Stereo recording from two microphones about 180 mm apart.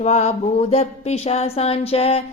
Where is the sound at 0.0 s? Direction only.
35° left (ahead or behind).